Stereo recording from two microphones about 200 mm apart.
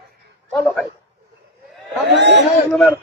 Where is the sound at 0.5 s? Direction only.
5° left (ahead or behind).